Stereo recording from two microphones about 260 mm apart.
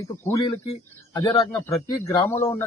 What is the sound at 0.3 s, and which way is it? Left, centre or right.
Speech, centre.